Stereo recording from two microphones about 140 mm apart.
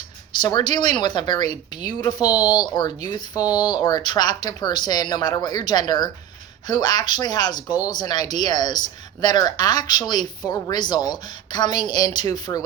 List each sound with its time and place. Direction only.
0.4 s a woman's voice: 30° left (ahead or behind)